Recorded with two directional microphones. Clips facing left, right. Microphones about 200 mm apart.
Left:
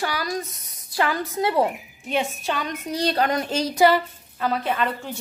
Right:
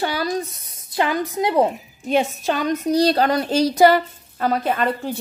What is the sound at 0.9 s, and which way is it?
Speech, 20° right (ahead or behind).